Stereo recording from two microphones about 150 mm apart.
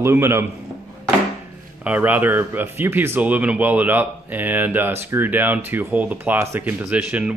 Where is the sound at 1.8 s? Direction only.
10° right (ahead or behind).